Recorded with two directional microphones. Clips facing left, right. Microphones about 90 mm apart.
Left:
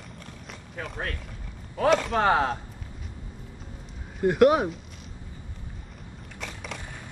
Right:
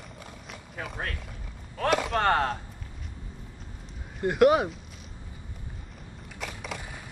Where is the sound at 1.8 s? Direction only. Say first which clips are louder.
Left 3 dB; centre (ahead or behind).